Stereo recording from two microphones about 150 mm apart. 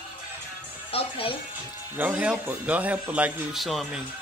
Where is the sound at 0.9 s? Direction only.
40° left (ahead or behind).